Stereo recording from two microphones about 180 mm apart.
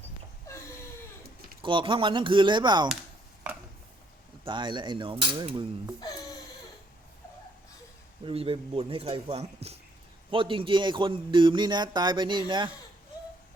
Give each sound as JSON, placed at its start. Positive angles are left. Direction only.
{"t": 1.6, "sound": "a man's voice", "side_deg": -25}
{"t": 4.4, "sound": "a man's voice", "side_deg": -25}
{"t": 8.2, "sound": "a man's voice", "side_deg": -30}